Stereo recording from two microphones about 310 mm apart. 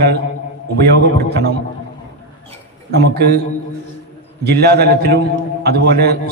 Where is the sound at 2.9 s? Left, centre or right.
Right.